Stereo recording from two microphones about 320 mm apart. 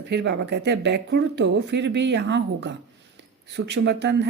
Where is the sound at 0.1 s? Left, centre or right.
Right.